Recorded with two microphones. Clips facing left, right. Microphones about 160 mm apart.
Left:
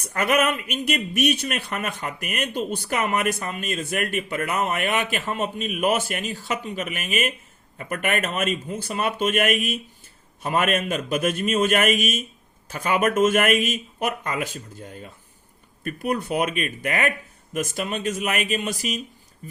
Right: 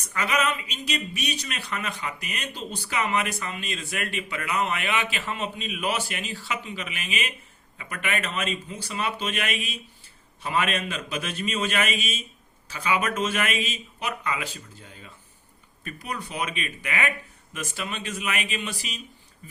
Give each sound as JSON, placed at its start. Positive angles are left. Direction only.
{"t": 0.0, "sound": "speech", "side_deg": 55}